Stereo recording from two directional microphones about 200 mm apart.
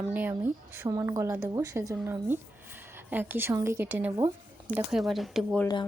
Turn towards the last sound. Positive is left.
turn(degrees=5)  # may be behind; listen again after turning